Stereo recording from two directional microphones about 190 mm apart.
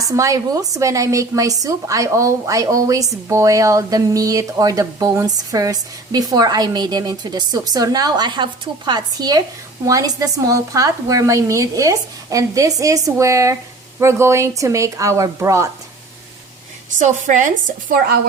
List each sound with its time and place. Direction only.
0.0 s speech: 15° right (ahead or behind)
17.0 s a woman's voice: 40° right (ahead or behind)